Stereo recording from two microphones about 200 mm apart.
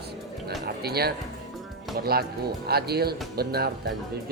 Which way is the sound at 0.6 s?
50° right (ahead or behind).